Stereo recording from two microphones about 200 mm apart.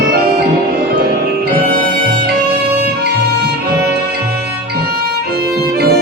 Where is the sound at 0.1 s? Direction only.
50° right (ahead or behind).